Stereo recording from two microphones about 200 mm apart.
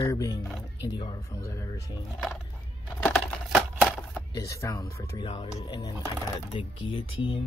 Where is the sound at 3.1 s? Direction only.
5° right (ahead or behind).